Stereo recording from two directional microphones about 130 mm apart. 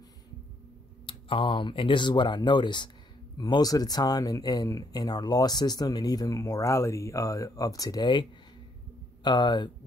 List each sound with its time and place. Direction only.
1.0 s speech: 40° left (ahead or behind)